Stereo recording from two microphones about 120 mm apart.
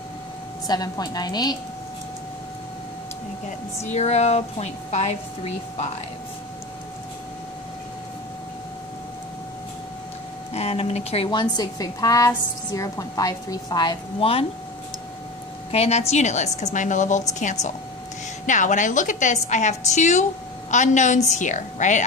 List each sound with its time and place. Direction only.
0.7 s a woman's voice: 35° left (ahead or behind)
3.4 s a woman's voice: 75° left (ahead or behind)
10.5 s speech: 60° left (ahead or behind)
11.2 s a woman's voice: 35° left (ahead or behind)
14.2 s speech: 50° left (ahead or behind)
15.7 s a woman's voice: 60° left (ahead or behind); by 22.0 s 90° left